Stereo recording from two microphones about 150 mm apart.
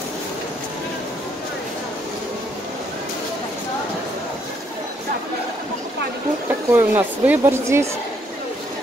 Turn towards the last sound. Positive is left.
turn(degrees=-15)  # may be behind; listen again after turning